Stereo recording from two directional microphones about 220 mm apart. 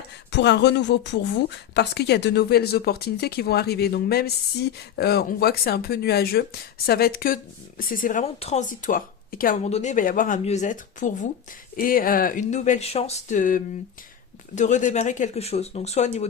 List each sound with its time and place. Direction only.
0.3 s speech: 50° left (ahead or behind); by 16.0 s 30° left (ahead or behind)